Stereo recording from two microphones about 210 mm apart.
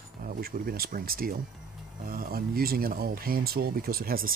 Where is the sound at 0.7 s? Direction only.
45° right (ahead or behind).